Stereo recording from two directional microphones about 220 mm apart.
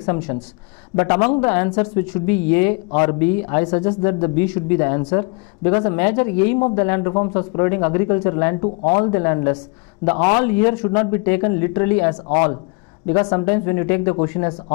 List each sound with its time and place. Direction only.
0.0 s speech: 20° left (ahead or behind)
8.6 s speech: 25° left (ahead or behind)
9.1 s speech: 15° left (ahead or behind)
10.0 s a man's voice: 35° left (ahead or behind)
10.4 s speech: 15° left (ahead or behind)
12.3 s a man's voice: 30° left (ahead or behind)
13.0 s speech: 15° left (ahead or behind)